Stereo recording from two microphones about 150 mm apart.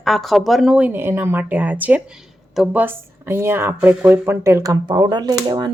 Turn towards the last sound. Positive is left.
turn(degrees=-25)  # may be behind; listen again after turning